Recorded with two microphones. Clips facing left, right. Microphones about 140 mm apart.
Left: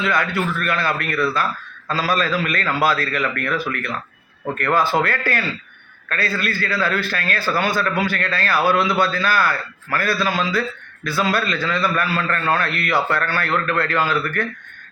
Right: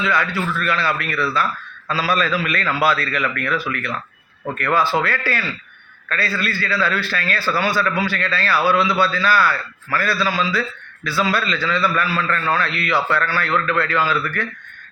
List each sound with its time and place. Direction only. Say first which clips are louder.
0.0 s a man's voice: even; 50° left (ahead or behind)